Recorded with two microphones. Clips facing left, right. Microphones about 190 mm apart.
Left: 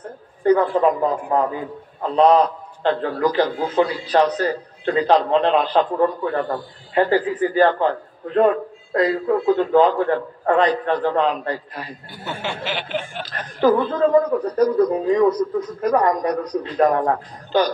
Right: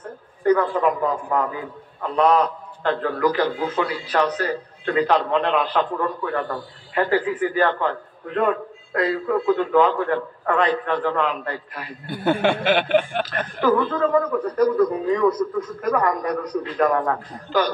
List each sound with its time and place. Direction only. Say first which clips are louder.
0.4 s a man's voice: left 3 dB; 30° left (ahead or behind)
9.6 s a man's voice: left 3 dB; 35° left (ahead or behind)
12.1 s speech: right 11 dB; 60° right (ahead or behind)
13.6 s a man's voice: left 3 dB; 35° left (ahead or behind)